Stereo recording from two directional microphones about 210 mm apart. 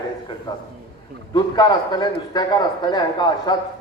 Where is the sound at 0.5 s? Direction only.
25° left (ahead or behind).